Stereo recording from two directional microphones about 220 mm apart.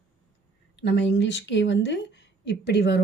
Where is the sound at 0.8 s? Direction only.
55° left (ahead or behind).